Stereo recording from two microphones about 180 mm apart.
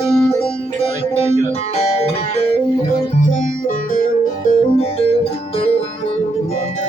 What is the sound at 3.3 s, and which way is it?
Music, 45° left (ahead or behind).